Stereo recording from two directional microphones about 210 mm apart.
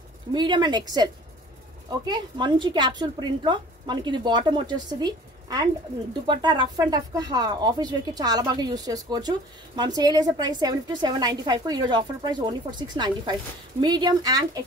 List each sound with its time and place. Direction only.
0.3 s a woman's voice: 20° right (ahead or behind)